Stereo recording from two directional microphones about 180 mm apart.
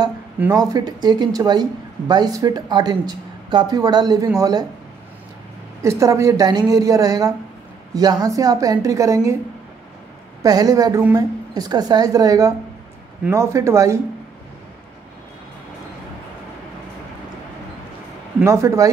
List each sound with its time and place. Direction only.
0.4 s speech: 15° right (ahead or behind)
5.8 s a woman's voice: 15° right (ahead or behind)
10.4 s a woman's voice: 20° right (ahead or behind)
18.4 s a woman's voice: 15° right (ahead or behind)